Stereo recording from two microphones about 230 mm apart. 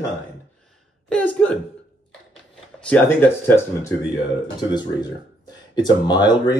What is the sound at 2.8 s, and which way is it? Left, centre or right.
Speech, centre.